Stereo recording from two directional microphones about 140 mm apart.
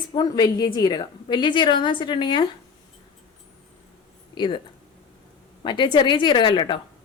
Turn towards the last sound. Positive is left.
turn(degrees=35)  # may be behind; listen again after turning